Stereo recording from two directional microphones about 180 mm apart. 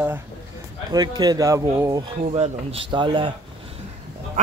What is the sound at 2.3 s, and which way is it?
Speech, 30° right (ahead or behind).